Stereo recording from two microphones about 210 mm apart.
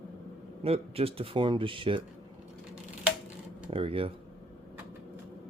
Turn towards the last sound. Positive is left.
turn(degrees=-25)  # may be behind; listen again after turning